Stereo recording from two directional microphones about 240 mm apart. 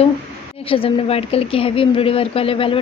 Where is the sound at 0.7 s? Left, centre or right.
Left.